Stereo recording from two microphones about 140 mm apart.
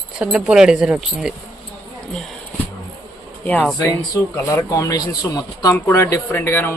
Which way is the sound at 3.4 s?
10° left (ahead or behind).